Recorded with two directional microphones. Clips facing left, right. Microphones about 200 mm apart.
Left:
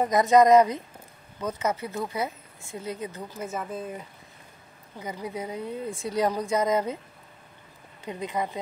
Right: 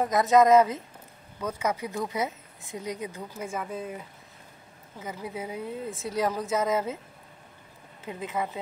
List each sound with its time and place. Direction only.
0.0 s speech: centre (ahead or behind)
8.0 s speech: 5° right (ahead or behind)